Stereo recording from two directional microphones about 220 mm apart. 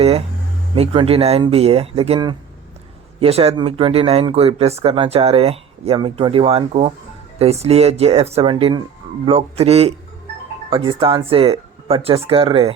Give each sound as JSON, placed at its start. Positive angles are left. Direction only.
{"t": 0.8, "sound": "speech", "side_deg": -25}